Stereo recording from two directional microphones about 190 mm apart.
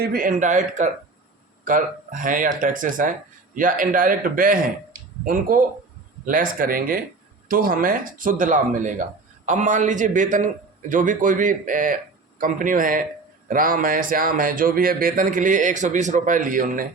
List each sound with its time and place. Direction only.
0.0 s speech: 50° right (ahead or behind)